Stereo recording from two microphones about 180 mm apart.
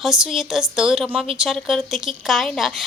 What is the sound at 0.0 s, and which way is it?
Speech, centre (ahead or behind).